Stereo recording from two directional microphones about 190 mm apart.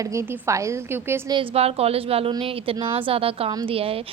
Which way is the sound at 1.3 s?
30° right (ahead or behind).